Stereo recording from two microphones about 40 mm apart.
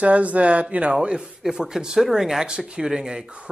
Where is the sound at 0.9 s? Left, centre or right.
Centre.